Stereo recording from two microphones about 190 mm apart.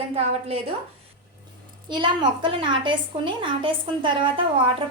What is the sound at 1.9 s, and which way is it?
A woman's voice, 25° right (ahead or behind).